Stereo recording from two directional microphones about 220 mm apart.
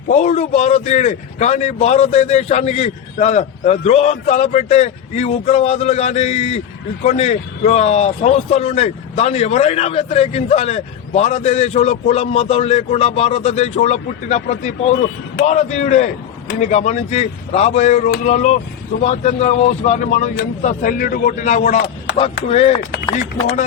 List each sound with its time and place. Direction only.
0.1 s a man's voice: 30° left (ahead or behind)